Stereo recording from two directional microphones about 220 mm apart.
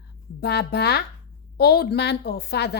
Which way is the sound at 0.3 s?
45° left (ahead or behind).